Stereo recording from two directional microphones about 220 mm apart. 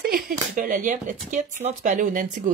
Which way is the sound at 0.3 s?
40° right (ahead or behind).